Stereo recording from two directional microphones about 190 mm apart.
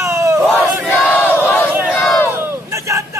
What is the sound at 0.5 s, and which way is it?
Battle cry, centre (ahead or behind).